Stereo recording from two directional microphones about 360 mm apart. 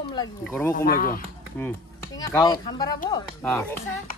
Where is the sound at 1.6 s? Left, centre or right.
Centre.